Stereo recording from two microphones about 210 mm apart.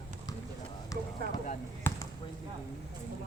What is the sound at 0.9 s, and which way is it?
Speech, 15° left (ahead or behind).